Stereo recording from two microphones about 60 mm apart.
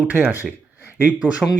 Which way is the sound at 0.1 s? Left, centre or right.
Right.